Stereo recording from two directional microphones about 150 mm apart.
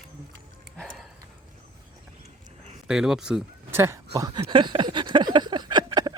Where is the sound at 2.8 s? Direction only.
5° right (ahead or behind).